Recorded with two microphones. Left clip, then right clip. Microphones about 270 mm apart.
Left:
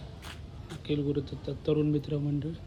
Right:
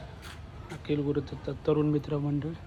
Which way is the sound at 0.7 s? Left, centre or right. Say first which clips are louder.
Right 1 dB; right.